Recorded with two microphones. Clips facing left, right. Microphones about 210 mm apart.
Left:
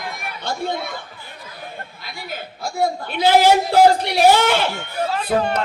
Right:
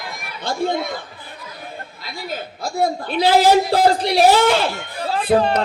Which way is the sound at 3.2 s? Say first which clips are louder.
Even; 35° right (ahead or behind).